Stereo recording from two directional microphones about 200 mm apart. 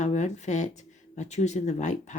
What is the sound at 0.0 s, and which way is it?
Speech, 35° left (ahead or behind).